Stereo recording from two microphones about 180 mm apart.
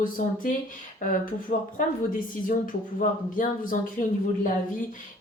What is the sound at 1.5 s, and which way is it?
Speech, 45° left (ahead or behind).